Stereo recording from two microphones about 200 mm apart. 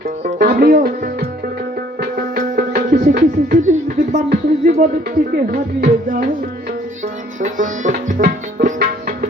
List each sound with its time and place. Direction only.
0.3 s music: 45° right (ahead or behind)
7.4 s music: 40° right (ahead or behind)